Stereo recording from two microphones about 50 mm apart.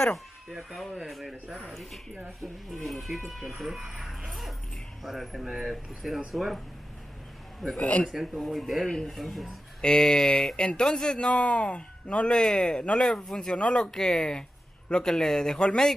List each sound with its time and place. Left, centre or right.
0.5 s speech: centre
1.0 s speech: centre
4.3 s dog: centre
5.0 s speech: centre
7.7 s a man's voice: left
8.1 s speech: centre
8.8 s speech: centre
9.1 s speech: centre
9.8 s speech: centre